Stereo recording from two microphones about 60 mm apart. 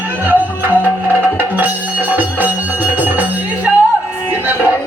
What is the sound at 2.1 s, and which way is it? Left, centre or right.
Music, right.